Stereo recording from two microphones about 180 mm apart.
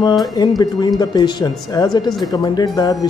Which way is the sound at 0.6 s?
25° left (ahead or behind).